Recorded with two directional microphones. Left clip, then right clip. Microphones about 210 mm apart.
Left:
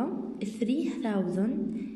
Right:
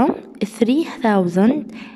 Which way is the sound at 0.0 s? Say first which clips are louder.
Right 14 dB; 40° right (ahead or behind).